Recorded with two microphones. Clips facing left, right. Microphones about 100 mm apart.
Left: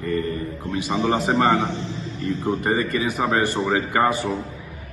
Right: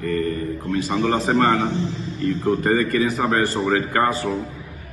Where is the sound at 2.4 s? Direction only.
20° left (ahead or behind).